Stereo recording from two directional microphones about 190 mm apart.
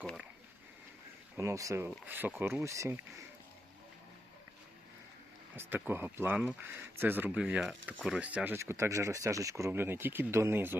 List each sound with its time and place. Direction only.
1.4 s speech: 15° right (ahead or behind)
5.5 s speech: 10° right (ahead or behind)